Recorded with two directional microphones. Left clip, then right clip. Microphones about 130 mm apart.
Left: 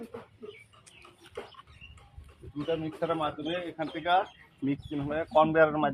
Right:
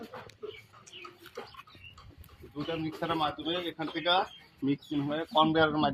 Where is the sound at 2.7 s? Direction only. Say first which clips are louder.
Left 3 dB; 30° left (ahead or behind).